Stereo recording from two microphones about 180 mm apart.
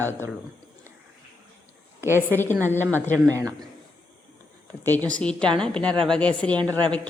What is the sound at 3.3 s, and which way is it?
Speech, 15° right (ahead or behind).